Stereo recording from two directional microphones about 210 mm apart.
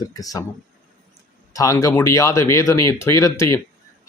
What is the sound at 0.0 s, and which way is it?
Speech, 15° left (ahead or behind).